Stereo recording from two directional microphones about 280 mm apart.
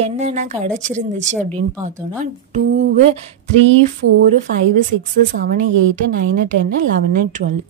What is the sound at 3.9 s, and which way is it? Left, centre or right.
Speech, right.